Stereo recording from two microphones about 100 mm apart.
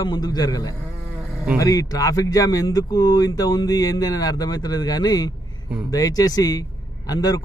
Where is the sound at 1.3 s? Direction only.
15° right (ahead or behind).